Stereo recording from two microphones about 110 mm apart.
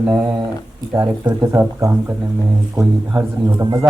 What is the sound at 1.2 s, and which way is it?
A man's voice, 25° right (ahead or behind).